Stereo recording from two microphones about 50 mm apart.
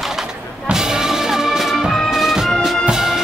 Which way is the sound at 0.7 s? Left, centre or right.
Centre.